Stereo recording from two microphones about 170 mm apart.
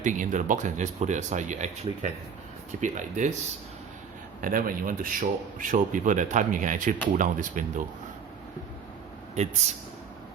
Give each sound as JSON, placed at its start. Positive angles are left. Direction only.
{"t": 0.0, "sound": "speech", "side_deg": -50}
{"t": 4.4, "sound": "speech", "side_deg": -55}